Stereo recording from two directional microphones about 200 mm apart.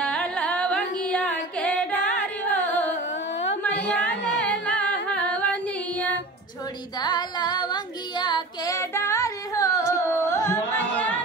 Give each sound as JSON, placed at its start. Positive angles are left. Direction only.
{"t": 0.0, "sound": "carnatic music", "side_deg": 5}
{"t": 3.6, "sound": "music", "side_deg": 10}
{"t": 7.0, "sound": "child singing", "side_deg": 20}